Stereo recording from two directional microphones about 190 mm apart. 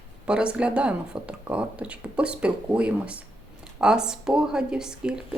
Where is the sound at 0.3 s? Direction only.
5° right (ahead or behind).